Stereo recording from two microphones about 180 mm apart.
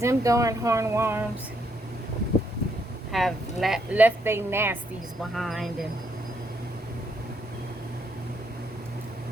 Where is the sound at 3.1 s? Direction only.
Centre (ahead or behind).